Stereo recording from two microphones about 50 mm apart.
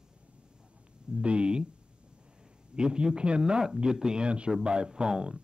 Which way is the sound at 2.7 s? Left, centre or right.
Centre.